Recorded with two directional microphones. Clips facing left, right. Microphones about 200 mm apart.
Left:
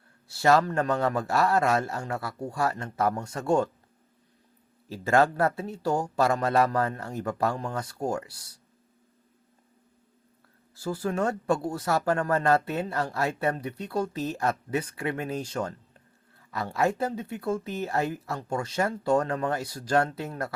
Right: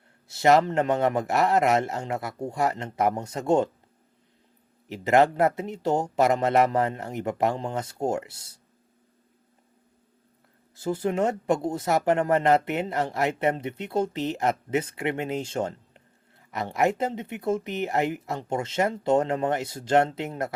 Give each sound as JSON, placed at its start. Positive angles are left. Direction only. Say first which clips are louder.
{"t": 0.3, "sound": "speech", "louder": "right 2 dB", "side_deg": -20}
{"t": 4.9, "sound": "speech", "louder": "right 3 dB", "side_deg": -20}
{"t": 10.8, "sound": "speech", "louder": "right 3 dB", "side_deg": -20}